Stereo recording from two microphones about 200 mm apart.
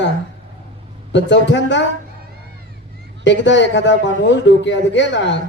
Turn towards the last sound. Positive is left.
turn(degrees=60)  # may be behind; listen again after turning